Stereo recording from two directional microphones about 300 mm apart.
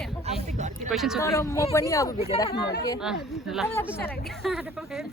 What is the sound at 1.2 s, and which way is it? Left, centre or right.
Speech, centre.